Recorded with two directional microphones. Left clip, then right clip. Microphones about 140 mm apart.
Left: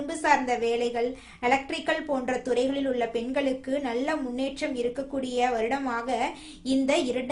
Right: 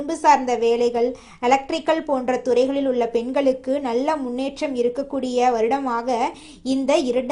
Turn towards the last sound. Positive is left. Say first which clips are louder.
# right 5 dB
turn(degrees=-30)  # may be behind; listen again after turning